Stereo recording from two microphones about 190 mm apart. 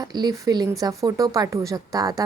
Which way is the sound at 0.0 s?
20° right (ahead or behind).